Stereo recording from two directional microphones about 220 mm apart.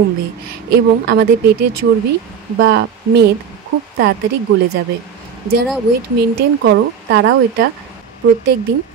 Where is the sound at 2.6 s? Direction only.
55° right (ahead or behind).